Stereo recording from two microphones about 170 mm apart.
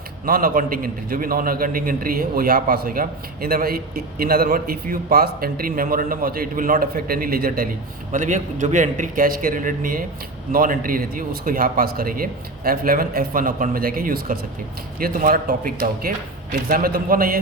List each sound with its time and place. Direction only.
0.3 s a man's voice: 60° right (ahead or behind)
8.1 s a man's voice: 50° right (ahead or behind)